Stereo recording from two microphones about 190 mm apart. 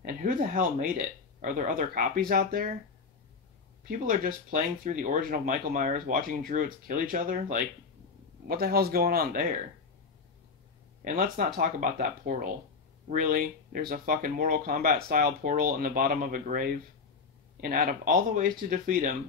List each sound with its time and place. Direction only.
0.2 s speech: 45° right (ahead or behind)
4.0 s speech: 45° right (ahead or behind)
11.1 s speech: 45° right (ahead or behind)